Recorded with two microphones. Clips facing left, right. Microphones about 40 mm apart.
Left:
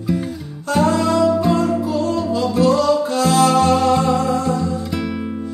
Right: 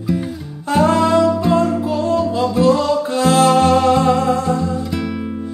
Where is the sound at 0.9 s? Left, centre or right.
Right.